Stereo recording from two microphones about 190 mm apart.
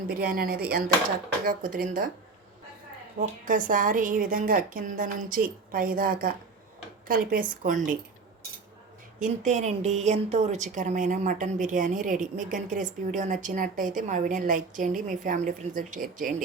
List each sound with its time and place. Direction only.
0.1 s a woman's voice: 50° right (ahead or behind)
3.2 s a woman's voice: 45° right (ahead or behind)
9.1 s a woman's voice: 40° right (ahead or behind)